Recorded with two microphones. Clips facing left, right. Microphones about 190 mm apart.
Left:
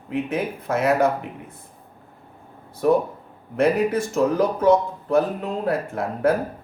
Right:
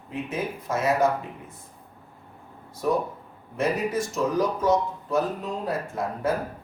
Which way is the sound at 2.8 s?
65° left (ahead or behind).